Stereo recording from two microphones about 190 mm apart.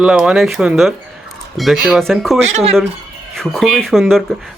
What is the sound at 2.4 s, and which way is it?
Speech, 35° right (ahead or behind).